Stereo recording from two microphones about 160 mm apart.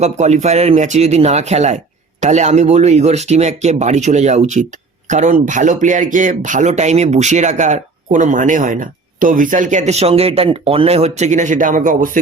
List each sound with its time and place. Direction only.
0.0 s speech: 45° right (ahead or behind)